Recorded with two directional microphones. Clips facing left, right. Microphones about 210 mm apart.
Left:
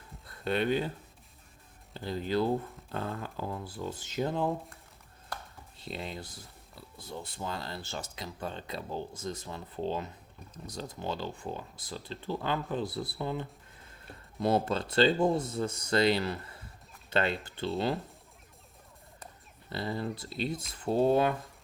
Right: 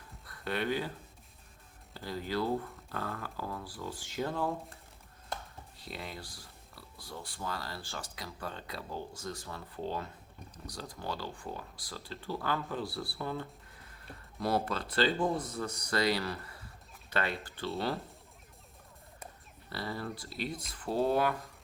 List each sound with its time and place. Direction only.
0.3 s speech: 25° left (ahead or behind)
1.9 s speech: 20° left (ahead or behind)
5.3 s a sound: 25° right (ahead or behind)
5.8 s speech: 25° left (ahead or behind)
19.7 s speech: 20° left (ahead or behind)